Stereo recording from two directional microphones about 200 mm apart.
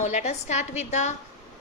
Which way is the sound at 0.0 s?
35° left (ahead or behind).